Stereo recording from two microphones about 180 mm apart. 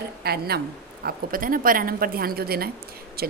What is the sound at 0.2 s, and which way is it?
A woman's voice, 60° right (ahead or behind).